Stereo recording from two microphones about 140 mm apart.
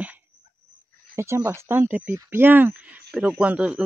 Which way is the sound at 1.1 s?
20° right (ahead or behind).